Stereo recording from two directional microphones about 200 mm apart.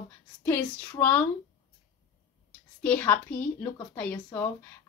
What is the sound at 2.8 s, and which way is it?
A woman's voice, 5° left (ahead or behind).